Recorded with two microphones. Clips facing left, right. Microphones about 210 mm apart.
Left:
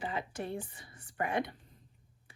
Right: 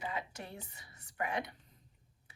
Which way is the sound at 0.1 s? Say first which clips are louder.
Left 6 dB; 25° left (ahead or behind).